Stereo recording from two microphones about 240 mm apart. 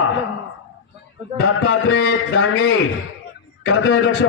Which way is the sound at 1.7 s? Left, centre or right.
Left.